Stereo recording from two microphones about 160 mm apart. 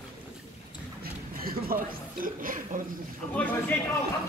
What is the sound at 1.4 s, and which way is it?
Music, 65° right (ahead or behind).